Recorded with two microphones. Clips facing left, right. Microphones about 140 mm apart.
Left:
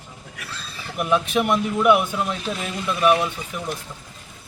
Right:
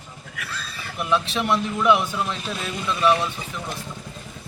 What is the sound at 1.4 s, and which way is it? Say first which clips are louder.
Speech: left 3 dB; 15° left (ahead or behind).